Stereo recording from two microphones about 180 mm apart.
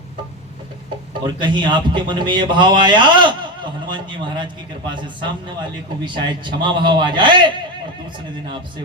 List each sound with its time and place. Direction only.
1.4 s a man's voice: 25° right (ahead or behind)
6.1 s a man's voice: 25° right (ahead or behind)